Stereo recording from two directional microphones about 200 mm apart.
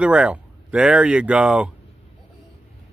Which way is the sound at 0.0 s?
5° right (ahead or behind).